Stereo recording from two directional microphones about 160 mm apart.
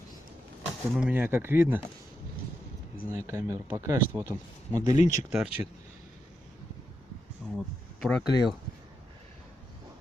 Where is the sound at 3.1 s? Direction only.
15° right (ahead or behind).